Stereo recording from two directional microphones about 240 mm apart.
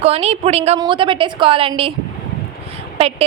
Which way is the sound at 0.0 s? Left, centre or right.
Right.